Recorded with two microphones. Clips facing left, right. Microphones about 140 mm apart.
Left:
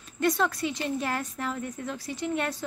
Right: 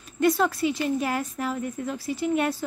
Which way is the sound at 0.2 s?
5° right (ahead or behind).